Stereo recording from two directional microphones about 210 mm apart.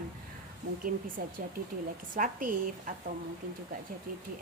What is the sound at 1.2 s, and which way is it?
A woman's voice, 45° right (ahead or behind).